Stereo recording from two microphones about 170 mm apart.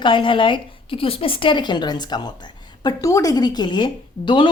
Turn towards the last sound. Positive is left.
turn(degrees=25)  # may be behind; listen again after turning